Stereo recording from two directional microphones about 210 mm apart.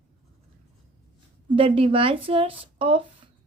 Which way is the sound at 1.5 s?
25° right (ahead or behind).